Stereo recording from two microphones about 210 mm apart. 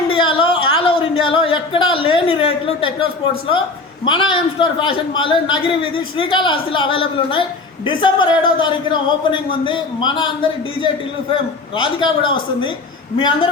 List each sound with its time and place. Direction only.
0.1 s a sound: 25° left (ahead or behind)
4.0 s a man's voice: 20° left (ahead or behind)
11.8 s a man's voice: 20° left (ahead or behind)